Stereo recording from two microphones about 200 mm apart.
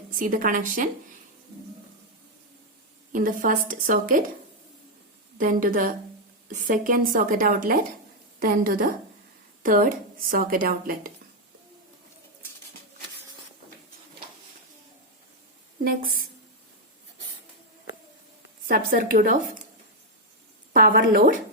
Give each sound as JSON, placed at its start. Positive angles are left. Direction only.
{"t": 0.1, "sound": "a woman's voice", "side_deg": -40}
{"t": 3.1, "sound": "a woman's voice", "side_deg": -40}
{"t": 5.4, "sound": "speech", "side_deg": -45}
{"t": 15.8, "sound": "speech", "side_deg": -45}
{"t": 18.7, "sound": "speech", "side_deg": -45}
{"t": 20.7, "sound": "speech", "side_deg": -45}